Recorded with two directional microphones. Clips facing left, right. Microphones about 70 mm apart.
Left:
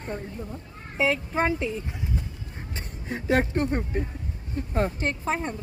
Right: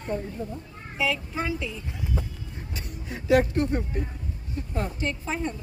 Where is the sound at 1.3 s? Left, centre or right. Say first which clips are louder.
Left 5 dB; left.